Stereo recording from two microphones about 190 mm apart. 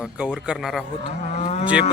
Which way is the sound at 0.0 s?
5° right (ahead or behind).